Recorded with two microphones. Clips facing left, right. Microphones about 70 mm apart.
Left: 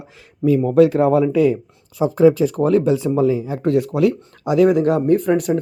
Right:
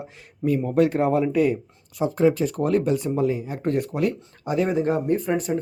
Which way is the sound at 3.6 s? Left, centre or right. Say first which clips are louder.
Left 7 dB; left.